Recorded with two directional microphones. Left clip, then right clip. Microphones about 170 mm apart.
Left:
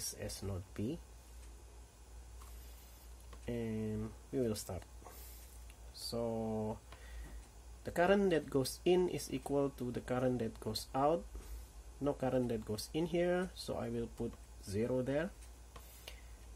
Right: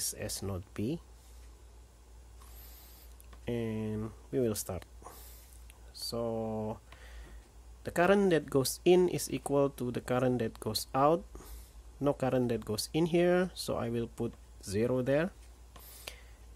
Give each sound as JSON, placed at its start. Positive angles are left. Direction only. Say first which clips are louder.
{"t": 0.1, "sound": "speech", "louder": "right 6 dB", "side_deg": -40}
{"t": 3.4, "sound": "speech", "louder": "right 5 dB", "side_deg": -35}
{"t": 7.8, "sound": "speech", "louder": "right 5 dB", "side_deg": -35}
{"t": 16.1, "sound": "writing", "louder": "right 7 dB", "side_deg": -40}